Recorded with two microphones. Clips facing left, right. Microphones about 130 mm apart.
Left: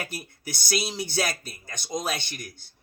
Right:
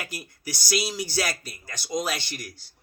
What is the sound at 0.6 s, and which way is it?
Speech, 25° left (ahead or behind).